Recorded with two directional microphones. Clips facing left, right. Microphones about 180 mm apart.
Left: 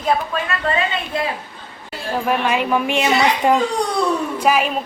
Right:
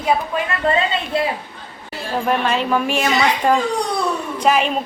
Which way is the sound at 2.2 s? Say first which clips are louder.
Even; 5° left (ahead or behind).